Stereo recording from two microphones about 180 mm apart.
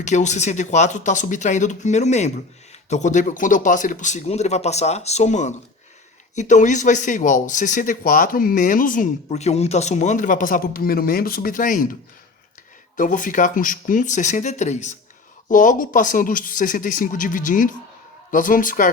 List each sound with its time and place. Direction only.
0.0 s speech: 40° left (ahead or behind)
13.0 s speech: 45° left (ahead or behind)